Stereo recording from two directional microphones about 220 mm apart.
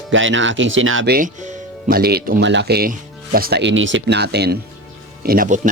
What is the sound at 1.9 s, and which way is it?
Speech, 45° right (ahead or behind).